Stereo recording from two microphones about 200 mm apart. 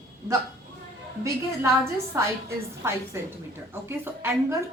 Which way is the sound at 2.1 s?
15° right (ahead or behind).